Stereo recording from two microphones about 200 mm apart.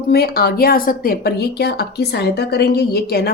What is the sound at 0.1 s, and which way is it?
Speech, 50° left (ahead or behind).